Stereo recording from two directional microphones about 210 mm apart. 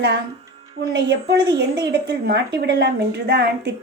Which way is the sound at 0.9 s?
55° right (ahead or behind).